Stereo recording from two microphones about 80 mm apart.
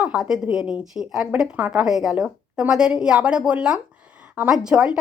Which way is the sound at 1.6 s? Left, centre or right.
Centre.